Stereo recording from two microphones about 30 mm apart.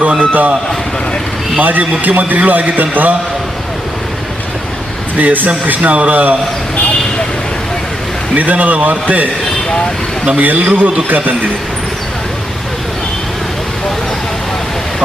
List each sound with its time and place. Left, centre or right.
0.2 s a man's voice: right
1.5 s a man's voice: right
5.1 s a man's voice: right
8.4 s a man's voice: right
10.4 s a man's voice: right